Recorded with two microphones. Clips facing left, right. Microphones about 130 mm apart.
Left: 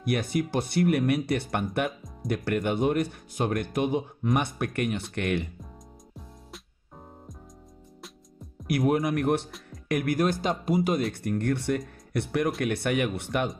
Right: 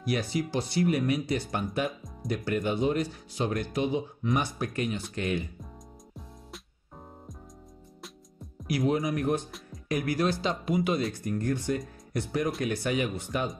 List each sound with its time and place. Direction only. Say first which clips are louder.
0.0 s speech: left 2 dB; 55° left (ahead or behind)
8.6 s speech: left 3 dB; 55° left (ahead or behind)
9.8 s speech: left 2 dB; 55° left (ahead or behind); by 11.0 s 40° left (ahead or behind)
11.1 s speech: left 2 dB; 65° left (ahead or behind)